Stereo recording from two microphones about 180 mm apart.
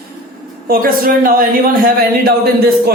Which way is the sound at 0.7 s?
55° right (ahead or behind).